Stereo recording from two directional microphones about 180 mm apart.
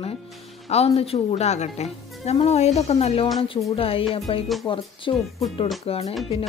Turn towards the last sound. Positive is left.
turn(degrees=35)  # may be behind; listen again after turning